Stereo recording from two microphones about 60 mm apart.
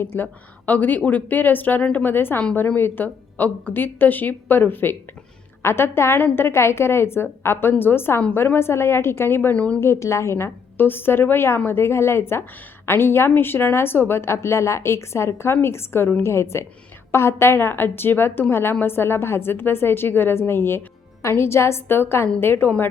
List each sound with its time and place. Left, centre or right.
0.0 s a woman's voice: left
0.6 s a woman's voice: left
9.6 s a woman's voice: left
9.8 s a woman's voice: left